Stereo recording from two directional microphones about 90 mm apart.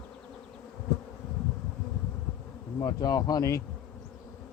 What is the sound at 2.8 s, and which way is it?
Speech, 45° left (ahead or behind).